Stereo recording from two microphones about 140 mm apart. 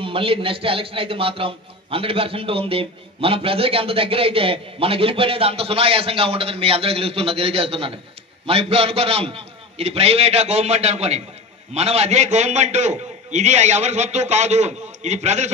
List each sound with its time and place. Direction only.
0.0 s a man's voice: 40° right (ahead or behind)